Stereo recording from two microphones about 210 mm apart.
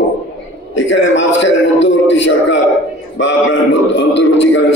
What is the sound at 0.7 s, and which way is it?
A man's voice, 60° left (ahead or behind).